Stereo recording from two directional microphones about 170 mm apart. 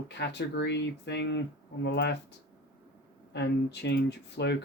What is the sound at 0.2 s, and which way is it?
Speech, 90° left.